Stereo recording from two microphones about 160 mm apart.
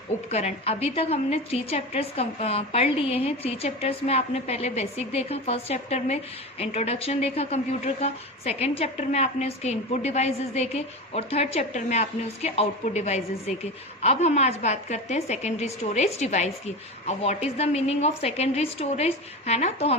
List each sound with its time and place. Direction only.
0.3 s a woman's voice: 40° left (ahead or behind)